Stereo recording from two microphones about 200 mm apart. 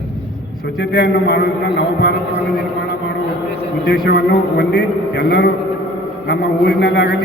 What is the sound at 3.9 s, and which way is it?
A man's voice, 55° left (ahead or behind).